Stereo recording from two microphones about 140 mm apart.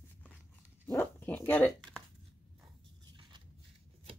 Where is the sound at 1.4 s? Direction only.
10° left (ahead or behind).